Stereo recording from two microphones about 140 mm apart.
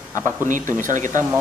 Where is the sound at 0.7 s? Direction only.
65° right (ahead or behind).